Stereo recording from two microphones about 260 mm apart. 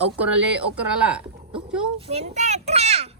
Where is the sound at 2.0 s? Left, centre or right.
Right.